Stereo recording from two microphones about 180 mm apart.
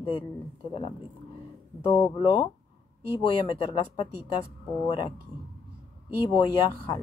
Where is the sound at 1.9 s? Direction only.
25° left (ahead or behind).